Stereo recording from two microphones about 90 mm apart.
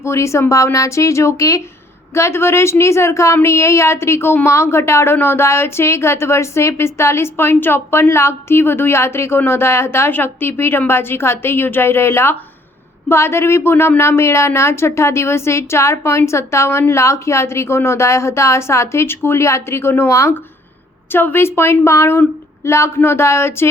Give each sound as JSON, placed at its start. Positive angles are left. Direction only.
{"t": 0.0, "sound": "a woman's voice", "side_deg": 30}